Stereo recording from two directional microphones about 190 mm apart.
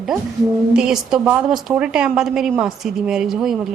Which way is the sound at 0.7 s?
5° right (ahead or behind).